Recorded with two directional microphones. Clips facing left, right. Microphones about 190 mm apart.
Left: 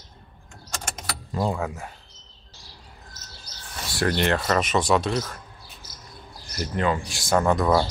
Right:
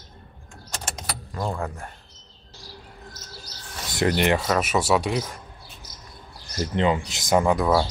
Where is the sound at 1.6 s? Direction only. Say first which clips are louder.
Left 1 dB; 5° left (ahead or behind).